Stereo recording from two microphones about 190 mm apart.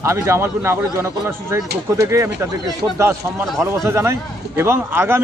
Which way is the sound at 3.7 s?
15° right (ahead or behind).